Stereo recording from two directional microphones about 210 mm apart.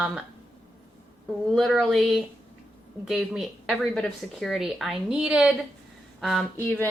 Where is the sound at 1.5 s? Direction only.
Centre (ahead or behind).